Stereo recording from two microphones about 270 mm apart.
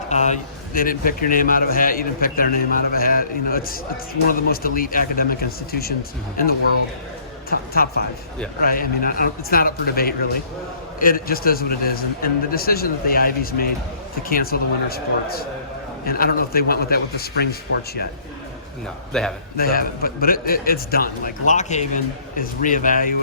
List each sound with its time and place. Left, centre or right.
0.1 s a man's voice: left
7.5 s a man's voice: left
19.1 s a man's voice: centre
19.5 s a man's voice: left